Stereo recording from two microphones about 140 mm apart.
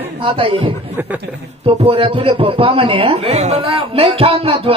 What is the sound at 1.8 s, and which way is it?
Speech, 40° right (ahead or behind).